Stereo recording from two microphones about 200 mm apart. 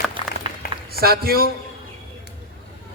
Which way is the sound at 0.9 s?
50° right (ahead or behind).